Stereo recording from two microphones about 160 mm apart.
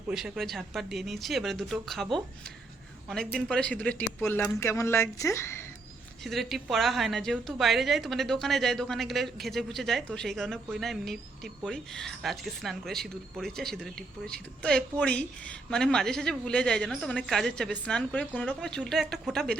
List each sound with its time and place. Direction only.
0.1 s a woman's voice: 5° right (ahead or behind)
3.3 s speech: 5° left (ahead or behind)
6.2 s a woman's voice: centre (ahead or behind)